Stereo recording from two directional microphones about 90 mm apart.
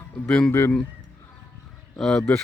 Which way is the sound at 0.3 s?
15° left (ahead or behind).